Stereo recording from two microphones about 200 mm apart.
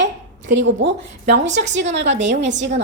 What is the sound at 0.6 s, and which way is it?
Speech, 65° right (ahead or behind).